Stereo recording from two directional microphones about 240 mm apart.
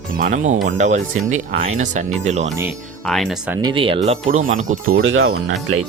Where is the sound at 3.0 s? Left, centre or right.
Centre.